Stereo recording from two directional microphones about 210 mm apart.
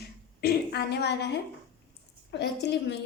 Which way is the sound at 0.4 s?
50° left (ahead or behind).